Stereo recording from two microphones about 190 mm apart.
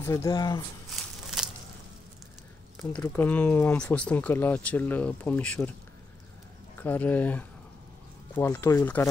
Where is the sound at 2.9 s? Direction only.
10° left (ahead or behind).